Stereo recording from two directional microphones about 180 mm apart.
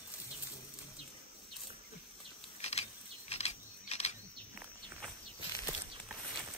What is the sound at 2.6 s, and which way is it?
Keys jangling, 35° left (ahead or behind).